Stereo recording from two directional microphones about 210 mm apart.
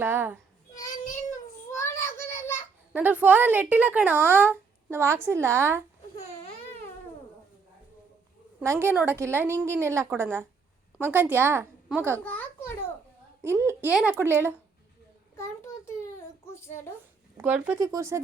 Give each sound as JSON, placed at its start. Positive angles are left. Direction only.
{"t": 0.0, "sound": "a woman's voice", "side_deg": -10}
{"t": 1.7, "sound": "child singing", "side_deg": 15}
{"t": 2.9, "sound": "a woman's voice", "side_deg": -10}
{"t": 8.6, "sound": "a woman's voice", "side_deg": -10}
{"t": 12.2, "sound": "a sound", "side_deg": 5}
{"t": 13.4, "sound": "a woman's voice", "side_deg": -10}
{"t": 15.4, "sound": "child singing", "side_deg": 15}
{"t": 17.3, "sound": "a woman's voice", "side_deg": -10}